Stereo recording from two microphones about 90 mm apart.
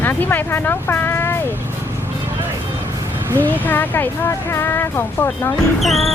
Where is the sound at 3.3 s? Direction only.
20° left (ahead or behind).